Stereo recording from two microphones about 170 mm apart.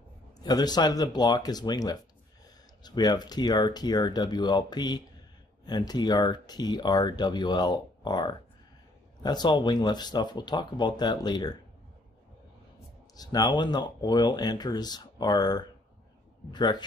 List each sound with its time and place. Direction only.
0.4 s speech: 25° left (ahead or behind)
13.1 s speech: 25° left (ahead or behind)